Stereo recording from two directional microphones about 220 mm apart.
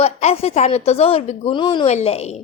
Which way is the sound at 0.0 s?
30° left (ahead or behind).